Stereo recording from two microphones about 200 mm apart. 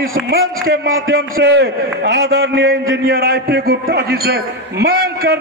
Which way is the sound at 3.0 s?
50° right (ahead or behind).